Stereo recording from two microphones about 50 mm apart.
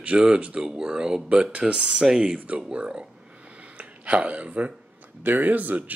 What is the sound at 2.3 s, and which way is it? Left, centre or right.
Speech, right.